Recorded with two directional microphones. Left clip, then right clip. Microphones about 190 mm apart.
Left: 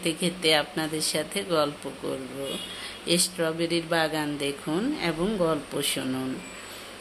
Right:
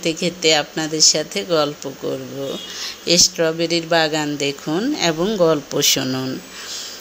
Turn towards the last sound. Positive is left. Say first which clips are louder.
# right 11 dB
turn(degrees=-30)  # may be behind; listen again after turning